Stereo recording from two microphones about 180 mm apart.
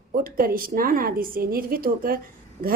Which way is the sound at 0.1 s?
50° right (ahead or behind).